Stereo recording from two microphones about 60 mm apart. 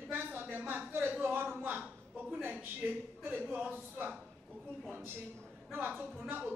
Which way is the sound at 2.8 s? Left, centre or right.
Right.